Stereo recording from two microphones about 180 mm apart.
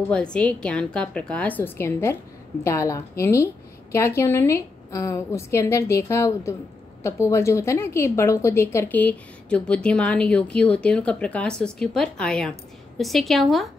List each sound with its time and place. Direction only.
0.1 s a woman's voice: 5° left (ahead or behind)